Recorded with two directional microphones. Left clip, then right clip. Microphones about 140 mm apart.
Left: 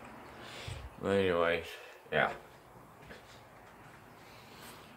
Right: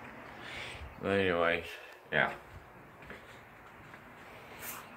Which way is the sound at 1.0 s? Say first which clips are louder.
Even; 15° left (ahead or behind).